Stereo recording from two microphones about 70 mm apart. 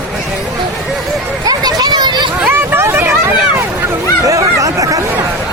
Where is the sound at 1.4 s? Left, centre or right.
Right.